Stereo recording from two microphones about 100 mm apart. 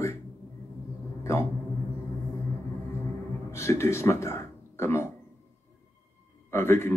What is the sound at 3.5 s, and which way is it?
Speech, 25° left (ahead or behind).